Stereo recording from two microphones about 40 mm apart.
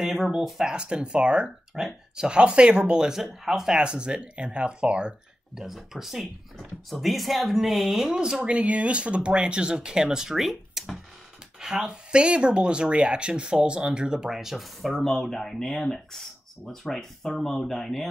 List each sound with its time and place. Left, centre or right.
0.0 s speech: centre
0.7 s speech: right
1.8 s speech: centre
2.2 s speech: right
5.6 s speech: centre
8.4 s speech: right; by 11.0 s centre
11.7 s speech: right; by 18.0 s centre